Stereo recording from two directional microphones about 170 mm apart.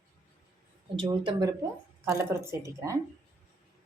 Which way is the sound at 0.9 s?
30° right (ahead or behind).